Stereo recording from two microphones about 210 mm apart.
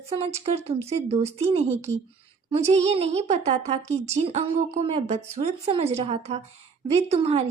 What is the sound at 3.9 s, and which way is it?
Speech, 30° right (ahead or behind).